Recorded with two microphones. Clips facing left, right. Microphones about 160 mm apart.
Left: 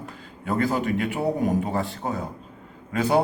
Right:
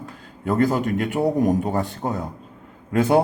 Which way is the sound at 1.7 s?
45° right (ahead or behind).